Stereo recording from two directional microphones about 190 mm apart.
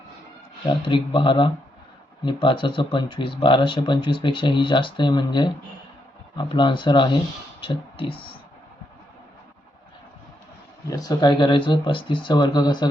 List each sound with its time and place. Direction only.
0.6 s speech: 25° left (ahead or behind)
10.8 s speech: 20° left (ahead or behind)